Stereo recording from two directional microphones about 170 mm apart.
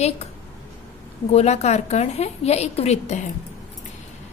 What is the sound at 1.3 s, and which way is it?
Speech, 40° left (ahead or behind).